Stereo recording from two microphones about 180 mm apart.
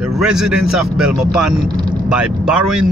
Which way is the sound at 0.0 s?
5° right (ahead or behind).